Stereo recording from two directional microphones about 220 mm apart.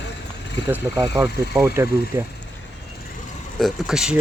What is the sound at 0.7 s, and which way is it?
Speech, 15° right (ahead or behind).